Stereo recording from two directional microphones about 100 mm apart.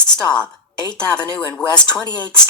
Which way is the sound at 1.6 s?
10° left (ahead or behind).